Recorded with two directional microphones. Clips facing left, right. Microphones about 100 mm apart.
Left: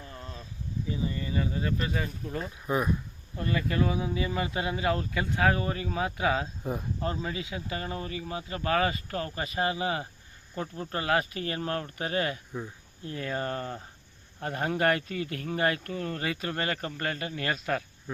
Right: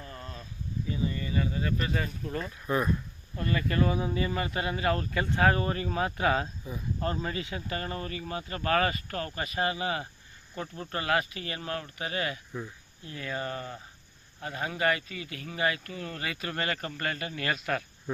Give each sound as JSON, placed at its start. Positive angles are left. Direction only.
{"t": 0.0, "sound": "a sound", "side_deg": 15}
{"t": 0.9, "sound": "speech", "side_deg": 25}
{"t": 1.9, "sound": "speech", "side_deg": 10}
{"t": 6.6, "sound": "speech", "side_deg": 55}
{"t": 7.0, "sound": "speech", "side_deg": 5}